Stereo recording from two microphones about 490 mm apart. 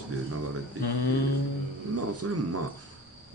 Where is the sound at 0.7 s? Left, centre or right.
Left.